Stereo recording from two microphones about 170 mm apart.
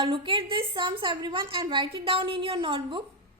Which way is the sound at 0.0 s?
30° right (ahead or behind).